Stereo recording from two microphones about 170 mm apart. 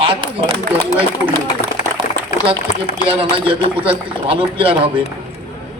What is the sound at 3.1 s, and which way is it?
A man's voice, 30° right (ahead or behind).